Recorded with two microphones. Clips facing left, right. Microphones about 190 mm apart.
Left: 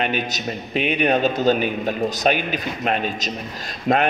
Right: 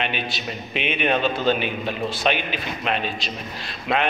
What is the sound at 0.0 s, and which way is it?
A man's voice, 40° left (ahead or behind).